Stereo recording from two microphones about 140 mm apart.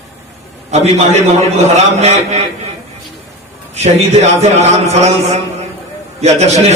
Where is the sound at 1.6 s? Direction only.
50° right (ahead or behind).